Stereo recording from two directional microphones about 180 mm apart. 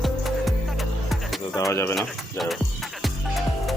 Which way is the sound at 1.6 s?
15° left (ahead or behind).